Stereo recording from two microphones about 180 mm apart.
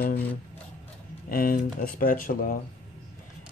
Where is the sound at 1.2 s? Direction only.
55° left (ahead or behind).